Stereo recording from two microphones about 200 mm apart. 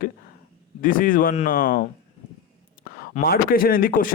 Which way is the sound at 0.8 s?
45° left (ahead or behind).